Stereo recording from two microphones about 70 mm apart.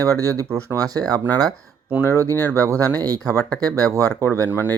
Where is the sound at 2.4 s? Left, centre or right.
Right.